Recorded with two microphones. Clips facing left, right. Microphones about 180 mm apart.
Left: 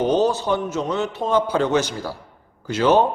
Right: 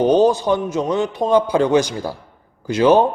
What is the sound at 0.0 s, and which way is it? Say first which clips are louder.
A man's voice: right 5 dB; 15° right (ahead or behind).